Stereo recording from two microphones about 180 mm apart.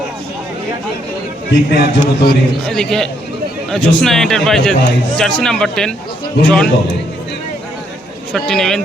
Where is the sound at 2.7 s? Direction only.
5° left (ahead or behind).